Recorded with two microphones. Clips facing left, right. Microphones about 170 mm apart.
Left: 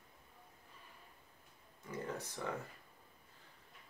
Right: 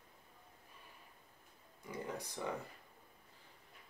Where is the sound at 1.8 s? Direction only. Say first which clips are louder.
Left 1 dB; 10° right (ahead or behind).